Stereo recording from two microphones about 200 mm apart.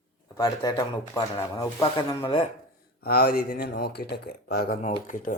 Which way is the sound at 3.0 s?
50° left (ahead or behind).